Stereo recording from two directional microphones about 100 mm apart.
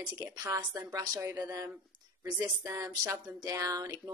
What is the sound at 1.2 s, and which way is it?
Speech, 20° right (ahead or behind).